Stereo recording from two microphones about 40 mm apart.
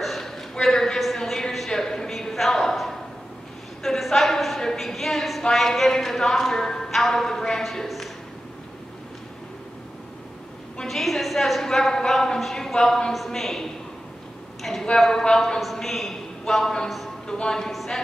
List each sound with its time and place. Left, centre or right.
0.0 s a sound: centre
1.0 s a woman's voice: centre
1.7 s a sound: centre
3.8 s a woman's voice: centre
10.9 s a woman's voice: centre
15.6 s a man's voice: centre
17.6 s a woman's voice: centre